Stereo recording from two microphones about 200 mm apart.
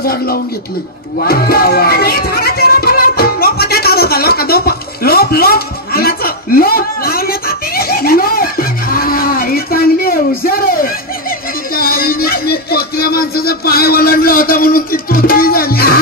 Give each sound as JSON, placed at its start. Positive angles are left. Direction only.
{"t": 0.0, "sound": "speech", "side_deg": 50}
{"t": 1.2, "sound": "music", "side_deg": 50}